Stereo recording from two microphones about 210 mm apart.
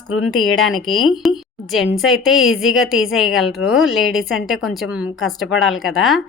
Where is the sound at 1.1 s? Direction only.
Centre (ahead or behind).